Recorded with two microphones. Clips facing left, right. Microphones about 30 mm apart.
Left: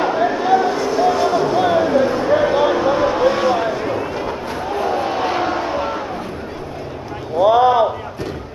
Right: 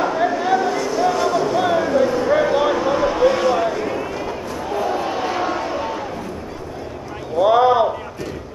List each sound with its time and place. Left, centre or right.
0.2 s a sound: centre
5.0 s vehicle: left
7.3 s run: centre